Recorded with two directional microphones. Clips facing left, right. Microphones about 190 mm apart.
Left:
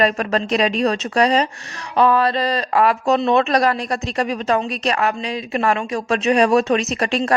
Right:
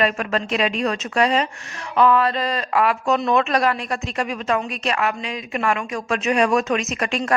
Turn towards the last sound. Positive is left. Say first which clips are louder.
# left 3 dB
turn(degrees=35)  # may be behind; listen again after turning